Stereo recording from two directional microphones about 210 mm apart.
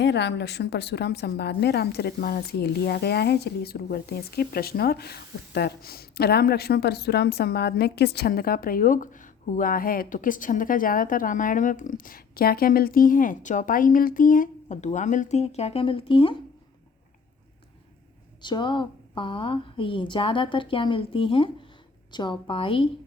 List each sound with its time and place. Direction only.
0.0 s a woman's voice: 55° left (ahead or behind); by 16.3 s 25° left (ahead or behind)
18.4 s a woman's voice: 20° left (ahead or behind)